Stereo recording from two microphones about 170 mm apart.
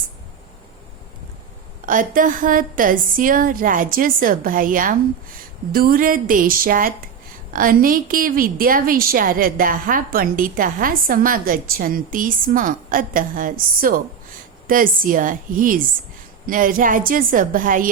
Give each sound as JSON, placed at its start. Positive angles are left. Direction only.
{"t": 1.9, "sound": "a woman's voice", "side_deg": -50}